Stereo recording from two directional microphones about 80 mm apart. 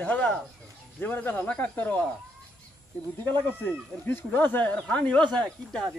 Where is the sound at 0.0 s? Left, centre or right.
Centre.